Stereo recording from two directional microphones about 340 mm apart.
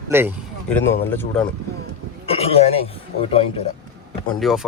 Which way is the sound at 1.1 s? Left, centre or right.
Centre.